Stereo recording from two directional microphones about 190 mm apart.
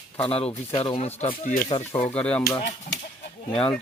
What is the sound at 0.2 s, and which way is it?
Speech, 30° left (ahead or behind).